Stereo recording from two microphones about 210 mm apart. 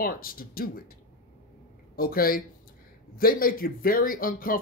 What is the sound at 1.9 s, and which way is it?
Speech, 45° left (ahead or behind).